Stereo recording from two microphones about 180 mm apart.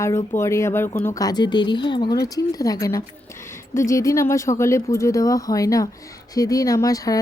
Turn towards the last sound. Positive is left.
turn(degrees=20)  # may be behind; listen again after turning